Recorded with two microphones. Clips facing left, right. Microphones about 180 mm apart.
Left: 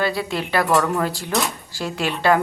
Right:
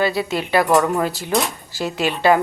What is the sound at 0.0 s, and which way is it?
Speech, 5° right (ahead or behind).